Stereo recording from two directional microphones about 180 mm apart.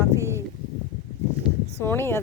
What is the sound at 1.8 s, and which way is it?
Speech, 10° left (ahead or behind).